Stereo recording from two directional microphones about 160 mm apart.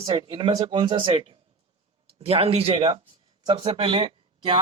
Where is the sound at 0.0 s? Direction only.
30° right (ahead or behind).